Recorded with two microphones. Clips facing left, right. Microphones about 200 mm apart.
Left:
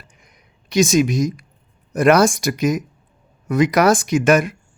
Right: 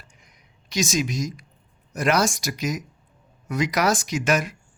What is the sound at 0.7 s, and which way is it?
A man's voice, 55° left (ahead or behind).